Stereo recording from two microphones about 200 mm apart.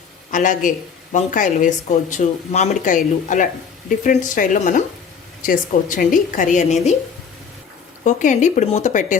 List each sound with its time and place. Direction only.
0.3 s speech: 40° left (ahead or behind)
8.0 s speech: 40° left (ahead or behind)